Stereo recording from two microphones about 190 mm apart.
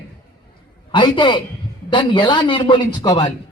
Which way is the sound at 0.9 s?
25° left (ahead or behind).